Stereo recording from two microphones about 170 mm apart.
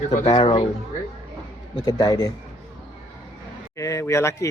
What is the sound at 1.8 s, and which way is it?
Speech, 20° left (ahead or behind).